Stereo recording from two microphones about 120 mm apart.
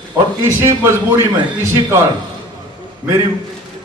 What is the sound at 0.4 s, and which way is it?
Speech, 20° right (ahead or behind).